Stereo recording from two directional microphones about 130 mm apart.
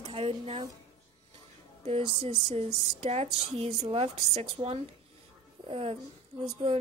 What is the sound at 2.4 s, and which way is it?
Speech, 55° right (ahead or behind).